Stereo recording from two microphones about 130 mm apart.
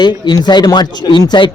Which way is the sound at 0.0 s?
35° left (ahead or behind).